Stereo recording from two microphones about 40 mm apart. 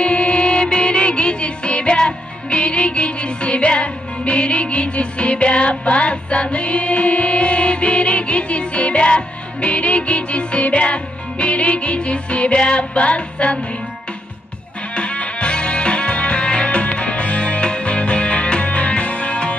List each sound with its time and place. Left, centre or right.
0.0 s music: left
15.0 s music: left